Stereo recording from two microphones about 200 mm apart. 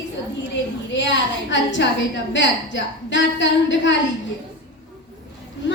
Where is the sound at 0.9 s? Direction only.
65° left (ahead or behind).